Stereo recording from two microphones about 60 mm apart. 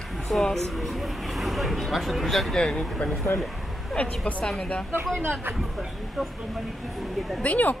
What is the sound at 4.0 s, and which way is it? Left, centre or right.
Speech, left.